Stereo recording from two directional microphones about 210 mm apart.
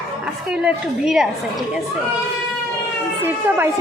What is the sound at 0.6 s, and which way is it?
Speech, centre (ahead or behind).